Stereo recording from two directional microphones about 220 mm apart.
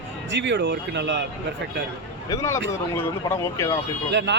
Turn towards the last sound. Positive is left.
turn(degrees=-55)  # may be behind; listen again after turning